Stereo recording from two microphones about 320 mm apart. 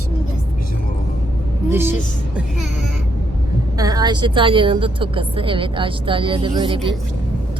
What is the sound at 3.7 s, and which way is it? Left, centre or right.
A woman's voice, centre.